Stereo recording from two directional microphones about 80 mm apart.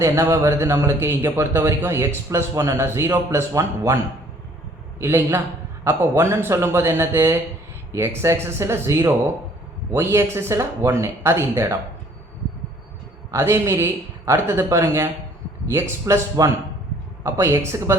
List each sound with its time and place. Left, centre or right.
0.0 s a man's voice: right
13.3 s speech: right